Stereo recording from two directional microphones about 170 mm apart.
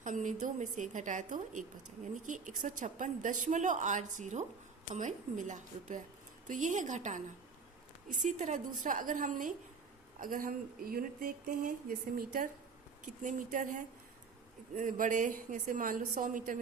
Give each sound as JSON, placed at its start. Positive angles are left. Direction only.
{"t": 0.0, "sound": "a woman's voice", "side_deg": -50}